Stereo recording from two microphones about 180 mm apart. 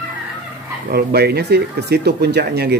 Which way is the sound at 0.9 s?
60° right (ahead or behind).